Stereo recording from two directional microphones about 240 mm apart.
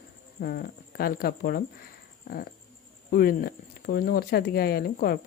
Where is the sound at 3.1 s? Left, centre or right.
Left.